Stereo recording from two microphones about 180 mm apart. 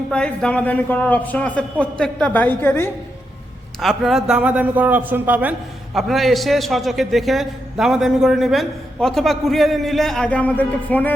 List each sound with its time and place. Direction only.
0.1 s a man's voice: 5° left (ahead or behind)
3.8 s a man's voice: centre (ahead or behind)